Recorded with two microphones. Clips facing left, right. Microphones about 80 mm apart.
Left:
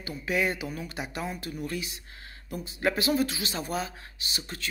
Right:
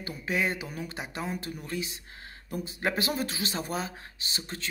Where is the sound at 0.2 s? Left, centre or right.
Right.